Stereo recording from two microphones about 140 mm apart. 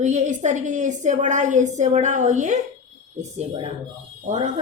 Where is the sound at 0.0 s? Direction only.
60° right (ahead or behind).